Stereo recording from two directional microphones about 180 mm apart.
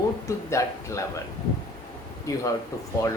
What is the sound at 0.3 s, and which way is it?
Speech, 15° left (ahead or behind).